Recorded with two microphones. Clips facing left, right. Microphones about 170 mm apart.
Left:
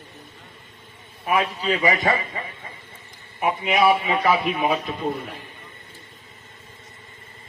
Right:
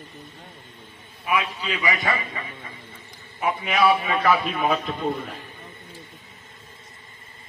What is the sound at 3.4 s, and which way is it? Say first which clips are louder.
A man's voice: left 2 dB; 20° left (ahead or behind).